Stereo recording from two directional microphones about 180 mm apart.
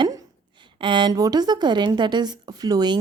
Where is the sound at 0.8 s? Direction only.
25° right (ahead or behind).